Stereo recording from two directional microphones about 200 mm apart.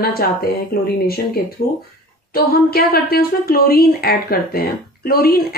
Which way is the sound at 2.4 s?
50° left (ahead or behind).